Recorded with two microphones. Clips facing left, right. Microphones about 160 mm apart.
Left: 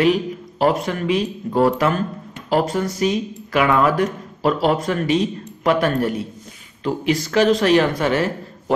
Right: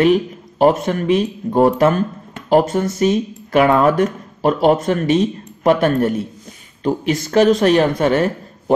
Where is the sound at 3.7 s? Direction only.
30° right (ahead or behind).